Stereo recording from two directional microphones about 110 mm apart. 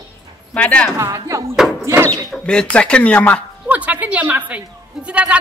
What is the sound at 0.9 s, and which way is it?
Speech, 30° right (ahead or behind).